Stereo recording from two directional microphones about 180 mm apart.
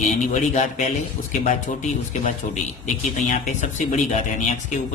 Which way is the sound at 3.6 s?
40° left (ahead or behind).